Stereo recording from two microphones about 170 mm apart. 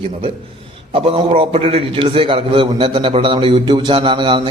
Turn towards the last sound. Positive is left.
turn(degrees=-30)  # may be behind; listen again after turning